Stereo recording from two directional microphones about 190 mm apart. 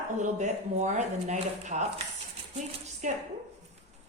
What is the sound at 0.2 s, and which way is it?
Speech, 40° right (ahead or behind).